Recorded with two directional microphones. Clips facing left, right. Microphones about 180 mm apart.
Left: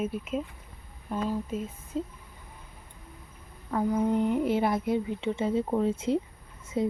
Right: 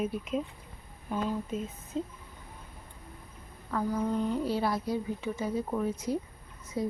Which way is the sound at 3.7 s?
20° left (ahead or behind).